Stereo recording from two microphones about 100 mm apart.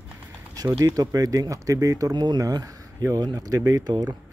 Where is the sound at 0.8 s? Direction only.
35° right (ahead or behind).